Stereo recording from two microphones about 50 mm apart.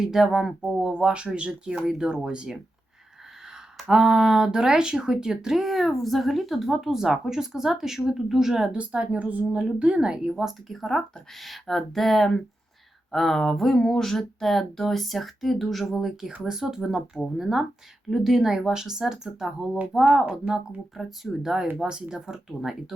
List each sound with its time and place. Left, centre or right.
0.0 s speech: centre
0.6 s speech: centre
3.8 s speech: centre
8.7 s speech: right
10.3 s speech: centre
19.9 s speech: centre